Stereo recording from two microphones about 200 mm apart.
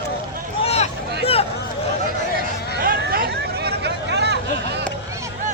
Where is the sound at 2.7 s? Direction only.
45° right (ahead or behind).